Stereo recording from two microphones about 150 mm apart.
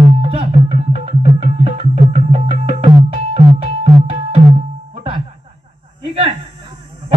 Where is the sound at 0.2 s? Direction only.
40° right (ahead or behind).